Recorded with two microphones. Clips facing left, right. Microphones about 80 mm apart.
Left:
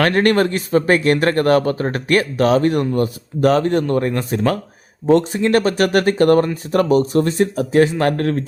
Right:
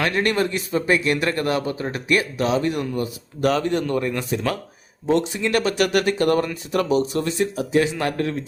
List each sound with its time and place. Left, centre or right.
0.0 s speech: left